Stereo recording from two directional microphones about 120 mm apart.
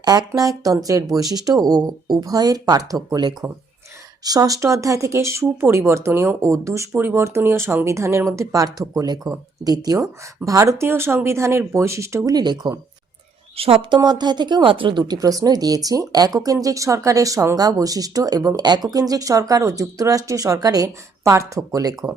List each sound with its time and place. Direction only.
0.0 s speech: 35° right (ahead or behind)
13.6 s speech: 55° right (ahead or behind)
14.0 s speech: 35° right (ahead or behind)